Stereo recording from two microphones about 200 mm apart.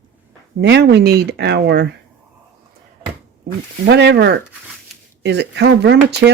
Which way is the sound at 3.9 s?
55° right (ahead or behind).